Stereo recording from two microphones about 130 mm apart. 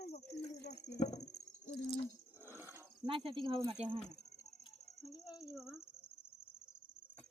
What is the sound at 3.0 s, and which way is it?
Speech, 40° right (ahead or behind).